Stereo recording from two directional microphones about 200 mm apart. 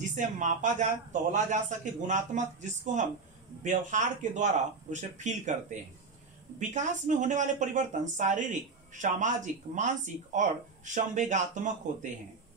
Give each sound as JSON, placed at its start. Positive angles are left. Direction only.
{"t": 0.0, "sound": "speech", "side_deg": -35}